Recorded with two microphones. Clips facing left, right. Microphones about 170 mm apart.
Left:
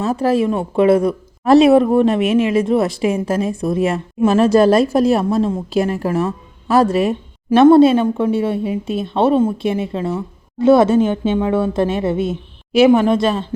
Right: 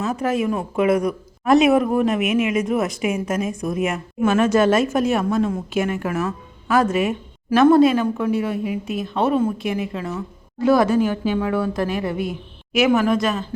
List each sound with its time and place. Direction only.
0.0 s speech: 35° left (ahead or behind)